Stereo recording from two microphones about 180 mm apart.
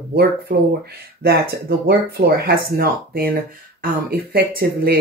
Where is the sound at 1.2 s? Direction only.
60° right (ahead or behind).